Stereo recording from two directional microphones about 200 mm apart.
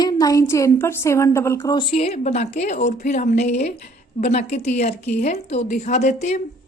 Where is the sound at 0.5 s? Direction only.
15° left (ahead or behind); by 6.4 s 35° left (ahead or behind).